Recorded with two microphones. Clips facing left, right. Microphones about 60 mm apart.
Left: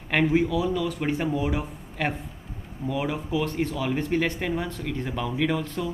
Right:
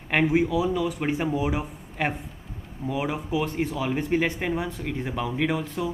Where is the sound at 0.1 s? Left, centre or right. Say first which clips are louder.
Even; centre.